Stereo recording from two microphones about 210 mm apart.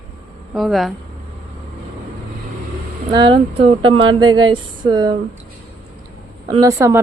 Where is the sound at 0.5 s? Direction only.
Centre (ahead or behind).